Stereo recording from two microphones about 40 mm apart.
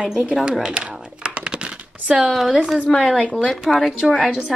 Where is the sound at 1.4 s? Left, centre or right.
Right.